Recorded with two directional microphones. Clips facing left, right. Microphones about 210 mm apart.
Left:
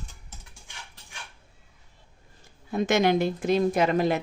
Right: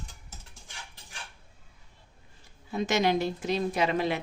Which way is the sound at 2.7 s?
55° left (ahead or behind).